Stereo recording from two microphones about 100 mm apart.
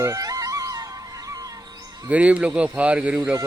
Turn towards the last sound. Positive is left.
turn(degrees=-15)  # may be behind; listen again after turning